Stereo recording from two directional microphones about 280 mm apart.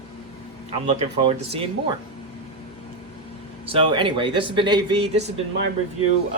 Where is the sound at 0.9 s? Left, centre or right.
Centre.